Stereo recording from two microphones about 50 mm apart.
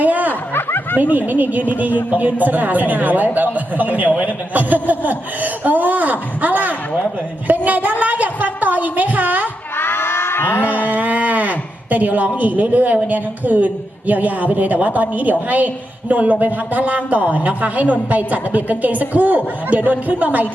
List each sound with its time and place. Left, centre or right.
0.0 s snicker: right
0.5 s snicker: left
1.3 s a woman's voice: right
9.7 s a sound: left
10.7 s a sound: right
12.4 s a woman's voice: right